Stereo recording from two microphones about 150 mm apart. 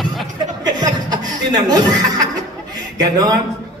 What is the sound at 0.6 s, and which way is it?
Chuckle, 25° right (ahead or behind).